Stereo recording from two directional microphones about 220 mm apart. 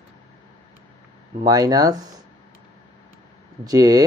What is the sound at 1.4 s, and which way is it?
Speech, 15° right (ahead or behind).